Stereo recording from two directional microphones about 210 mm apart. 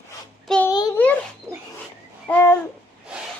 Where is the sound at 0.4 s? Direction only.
5° left (ahead or behind).